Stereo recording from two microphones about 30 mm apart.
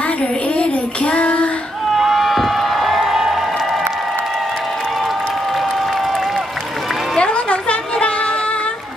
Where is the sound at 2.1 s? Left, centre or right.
Centre.